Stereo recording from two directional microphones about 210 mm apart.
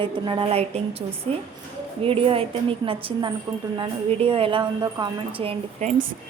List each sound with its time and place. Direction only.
0.0 s a woman's voice: 25° right (ahead or behind)
2.0 s a woman's voice: 25° right (ahead or behind)